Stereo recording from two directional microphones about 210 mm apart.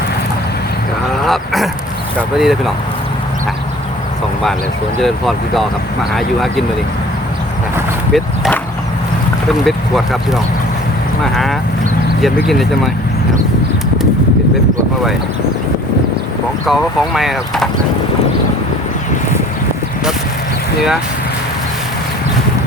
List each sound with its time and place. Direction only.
1.2 s a sound: centre (ahead or behind)
2.4 s speech: centre (ahead or behind)
5.0 s speech: centre (ahead or behind)
8.1 s speech: 5° left (ahead or behind)
9.6 s speech: centre (ahead or behind)
16.6 s speech: centre (ahead or behind)